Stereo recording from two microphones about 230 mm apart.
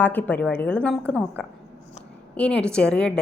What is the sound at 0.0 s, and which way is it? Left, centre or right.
Speech, centre.